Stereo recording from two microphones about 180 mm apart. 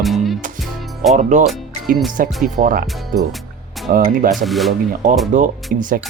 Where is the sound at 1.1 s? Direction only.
40° right (ahead or behind).